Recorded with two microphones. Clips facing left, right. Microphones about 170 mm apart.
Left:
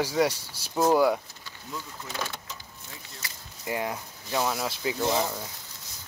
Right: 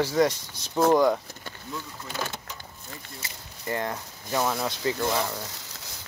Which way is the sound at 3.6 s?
10° left (ahead or behind).